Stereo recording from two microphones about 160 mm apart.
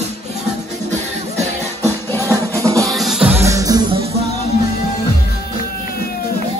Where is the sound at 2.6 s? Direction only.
20° right (ahead or behind).